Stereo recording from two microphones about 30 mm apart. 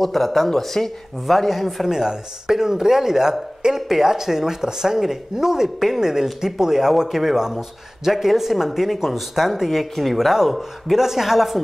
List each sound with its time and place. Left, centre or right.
0.0 s speech: centre
1.9 s speech: centre
9.7 s speech: centre